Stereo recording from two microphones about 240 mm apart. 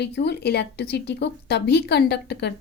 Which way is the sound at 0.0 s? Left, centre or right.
Left.